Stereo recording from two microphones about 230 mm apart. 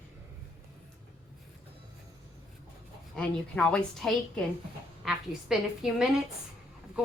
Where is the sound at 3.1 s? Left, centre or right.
Centre.